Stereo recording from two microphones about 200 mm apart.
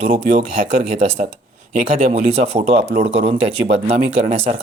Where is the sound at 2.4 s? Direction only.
50° right (ahead or behind).